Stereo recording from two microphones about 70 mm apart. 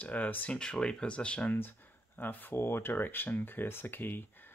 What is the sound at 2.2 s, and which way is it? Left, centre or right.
Speech, left.